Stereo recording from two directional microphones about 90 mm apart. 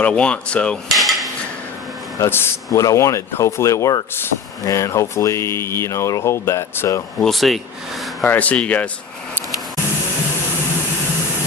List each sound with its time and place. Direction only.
0.0 s speech: 10° left (ahead or behind)
0.9 s cutlery: centre (ahead or behind)
2.1 s speech: 30° left (ahead or behind)
2.6 s speech: 40° left (ahead or behind)
7.2 s speech: centre (ahead or behind)
8.2 s speech: 15° left (ahead or behind)